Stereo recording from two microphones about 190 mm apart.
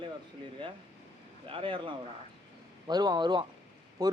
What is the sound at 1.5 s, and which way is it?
Speech, 25° right (ahead or behind).